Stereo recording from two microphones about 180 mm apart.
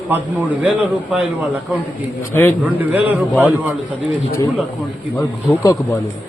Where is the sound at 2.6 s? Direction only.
10° right (ahead or behind).